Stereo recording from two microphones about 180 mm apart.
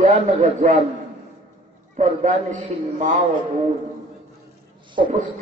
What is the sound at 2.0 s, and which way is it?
Speech, 40° right (ahead or behind).